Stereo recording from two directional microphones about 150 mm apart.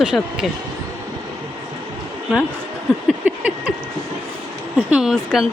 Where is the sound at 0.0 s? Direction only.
5° right (ahead or behind).